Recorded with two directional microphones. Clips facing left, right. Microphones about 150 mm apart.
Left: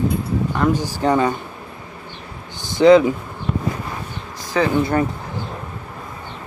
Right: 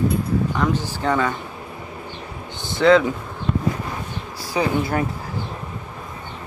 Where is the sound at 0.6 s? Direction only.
15° left (ahead or behind).